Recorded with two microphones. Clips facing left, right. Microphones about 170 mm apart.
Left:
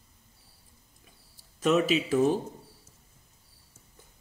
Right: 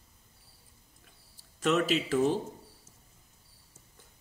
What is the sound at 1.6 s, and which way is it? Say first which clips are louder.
Speech: left 3 dB; 15° left (ahead or behind).